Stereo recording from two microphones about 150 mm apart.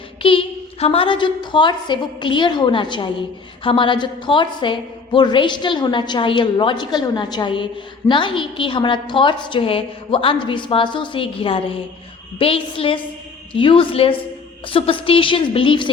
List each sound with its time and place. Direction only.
0.2 s a woman's voice: 35° left (ahead or behind)